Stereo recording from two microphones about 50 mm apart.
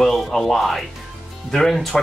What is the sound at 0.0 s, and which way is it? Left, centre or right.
Speech, centre.